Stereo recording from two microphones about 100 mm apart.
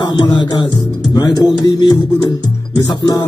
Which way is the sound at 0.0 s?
50° left (ahead or behind).